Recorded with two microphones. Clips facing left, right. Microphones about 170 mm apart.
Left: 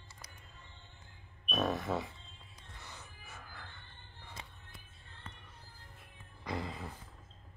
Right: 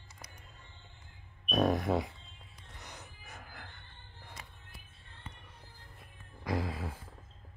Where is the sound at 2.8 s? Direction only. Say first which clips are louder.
Right 2 dB; 20° right (ahead or behind).